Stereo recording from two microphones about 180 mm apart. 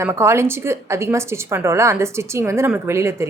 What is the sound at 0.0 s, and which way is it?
A woman's voice, 15° right (ahead or behind).